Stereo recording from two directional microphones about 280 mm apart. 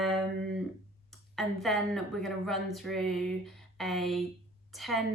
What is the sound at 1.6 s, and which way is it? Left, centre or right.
Speech, centre.